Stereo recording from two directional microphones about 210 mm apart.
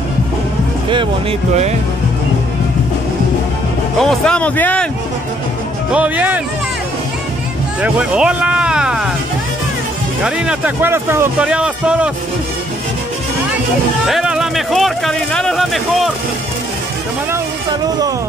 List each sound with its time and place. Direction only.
4.0 s speech: 5° left (ahead or behind)
5.9 s speech: 5° right (ahead or behind)
7.8 s speech: 5° right (ahead or behind)
10.2 s speech: 5° right (ahead or behind)
14.0 s speech: 5° right (ahead or behind)
17.3 s speech: 20° right (ahead or behind)